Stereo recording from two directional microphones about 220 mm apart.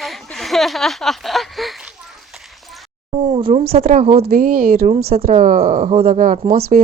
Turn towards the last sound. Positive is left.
turn(degrees=-40)  # may be behind; listen again after turning